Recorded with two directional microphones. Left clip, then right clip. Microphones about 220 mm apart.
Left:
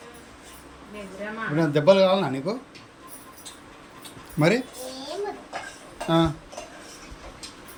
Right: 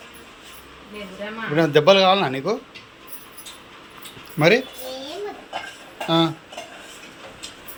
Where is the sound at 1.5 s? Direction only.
5° left (ahead or behind).